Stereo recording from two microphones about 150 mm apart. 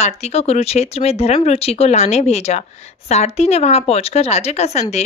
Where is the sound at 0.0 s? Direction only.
45° left (ahead or behind).